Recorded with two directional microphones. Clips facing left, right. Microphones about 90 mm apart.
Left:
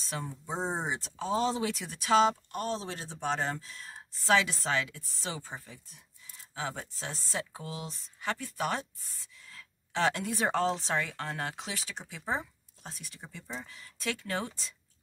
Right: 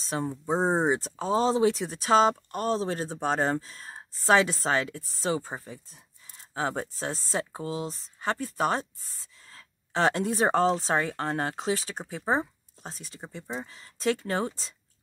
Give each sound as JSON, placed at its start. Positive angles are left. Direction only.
{"t": 0.0, "sound": "speech", "side_deg": -35}